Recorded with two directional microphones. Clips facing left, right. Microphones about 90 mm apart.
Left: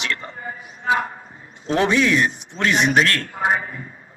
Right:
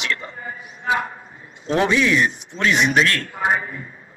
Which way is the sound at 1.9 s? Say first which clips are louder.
Even; 45° left (ahead or behind).